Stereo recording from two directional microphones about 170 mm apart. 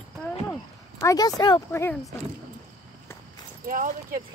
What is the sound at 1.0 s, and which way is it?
Speech, 20° left (ahead or behind).